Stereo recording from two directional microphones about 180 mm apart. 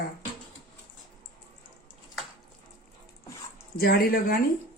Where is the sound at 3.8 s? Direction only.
55° left (ahead or behind).